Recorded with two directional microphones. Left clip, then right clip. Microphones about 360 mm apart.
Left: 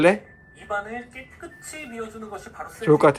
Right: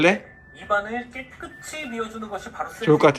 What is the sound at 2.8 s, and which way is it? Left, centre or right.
Speech, centre.